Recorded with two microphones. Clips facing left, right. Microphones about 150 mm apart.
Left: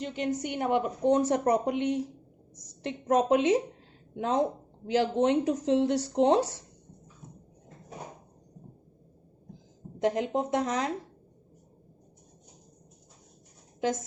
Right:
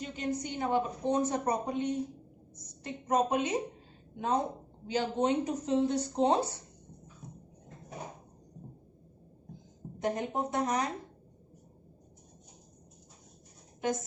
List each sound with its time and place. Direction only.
0.0 s a woman's voice: 70° left (ahead or behind); by 4.4 s 90° left
4.9 s a woman's voice: 75° left (ahead or behind)
10.0 s speech: 90° left